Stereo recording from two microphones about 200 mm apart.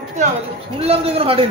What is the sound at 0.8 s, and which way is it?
Speech, 30° right (ahead or behind).